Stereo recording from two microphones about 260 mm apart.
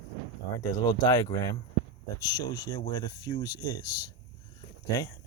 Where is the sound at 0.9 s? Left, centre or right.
Centre.